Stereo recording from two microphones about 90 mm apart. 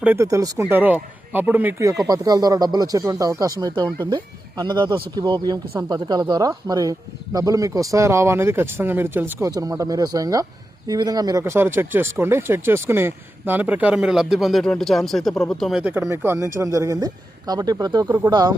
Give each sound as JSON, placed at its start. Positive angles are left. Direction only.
{"t": 0.2, "sound": "speech", "side_deg": -35}
{"t": 0.7, "sound": "speech", "side_deg": -20}
{"t": 1.8, "sound": "speech", "side_deg": -40}
{"t": 9.4, "sound": "speech", "side_deg": -40}
{"t": 11.4, "sound": "speech", "side_deg": -25}
{"t": 14.6, "sound": "speech", "side_deg": 5}
{"t": 15.8, "sound": "speech", "side_deg": -15}
{"t": 16.4, "sound": "speech", "side_deg": -35}
{"t": 18.3, "sound": "speech", "side_deg": -60}